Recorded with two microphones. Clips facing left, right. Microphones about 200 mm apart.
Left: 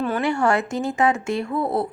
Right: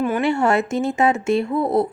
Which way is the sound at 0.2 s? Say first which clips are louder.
Right 1 dB; 25° right (ahead or behind).